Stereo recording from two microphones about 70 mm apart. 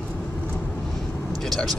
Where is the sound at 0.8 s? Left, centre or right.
Centre.